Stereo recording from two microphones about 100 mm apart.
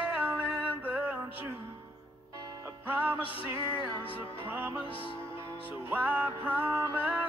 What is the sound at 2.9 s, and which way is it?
Music, 15° right (ahead or behind).